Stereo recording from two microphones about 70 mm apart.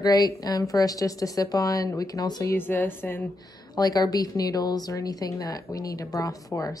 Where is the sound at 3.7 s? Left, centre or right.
Left.